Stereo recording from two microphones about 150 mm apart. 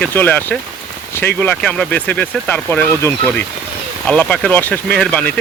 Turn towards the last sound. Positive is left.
turn(degrees=10)  # may be behind; listen again after turning